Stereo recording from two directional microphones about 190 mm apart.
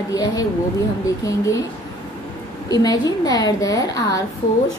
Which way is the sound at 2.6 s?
20° left (ahead or behind).